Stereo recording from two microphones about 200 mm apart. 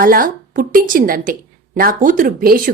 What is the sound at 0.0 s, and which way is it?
Speech, 45° right (ahead or behind).